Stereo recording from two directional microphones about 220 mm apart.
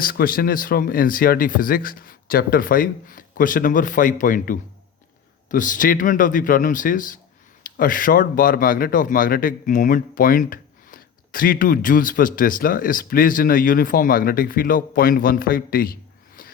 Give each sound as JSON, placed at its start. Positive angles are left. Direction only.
{"t": 0.0, "sound": "speech", "side_deg": 40}